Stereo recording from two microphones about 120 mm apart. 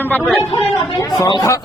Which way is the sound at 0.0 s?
15° left (ahead or behind).